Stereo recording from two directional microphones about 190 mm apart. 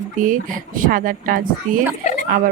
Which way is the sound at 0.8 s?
45° right (ahead or behind).